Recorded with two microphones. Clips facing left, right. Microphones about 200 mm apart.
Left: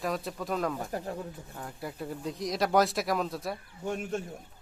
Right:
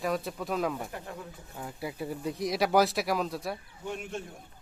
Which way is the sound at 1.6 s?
5° right (ahead or behind).